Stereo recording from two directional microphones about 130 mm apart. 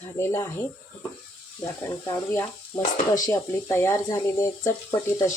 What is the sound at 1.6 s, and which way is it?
Speech, 20° left (ahead or behind).